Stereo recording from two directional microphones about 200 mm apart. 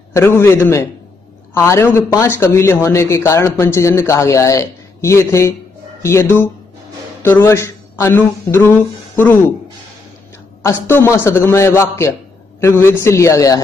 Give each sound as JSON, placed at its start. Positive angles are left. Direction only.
{"t": 0.1, "sound": "a man's voice", "side_deg": 10}
{"t": 10.6, "sound": "a man's voice", "side_deg": 10}